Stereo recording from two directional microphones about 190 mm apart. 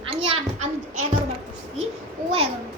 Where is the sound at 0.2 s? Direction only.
35° right (ahead or behind).